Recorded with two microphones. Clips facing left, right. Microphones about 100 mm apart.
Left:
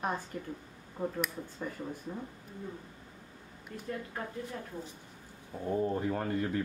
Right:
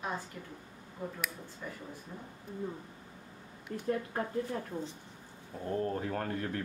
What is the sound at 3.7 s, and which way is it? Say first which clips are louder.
Speech: right 6 dB; 40° right (ahead or behind).